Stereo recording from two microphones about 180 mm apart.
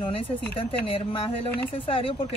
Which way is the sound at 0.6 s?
30° left (ahead or behind).